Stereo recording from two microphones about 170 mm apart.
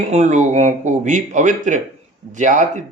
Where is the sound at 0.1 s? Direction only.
45° right (ahead or behind).